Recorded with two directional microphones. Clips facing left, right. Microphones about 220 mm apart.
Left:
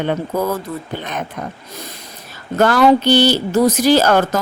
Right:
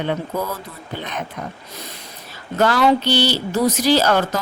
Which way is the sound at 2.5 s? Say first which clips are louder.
Left 4 dB; 50° left (ahead or behind).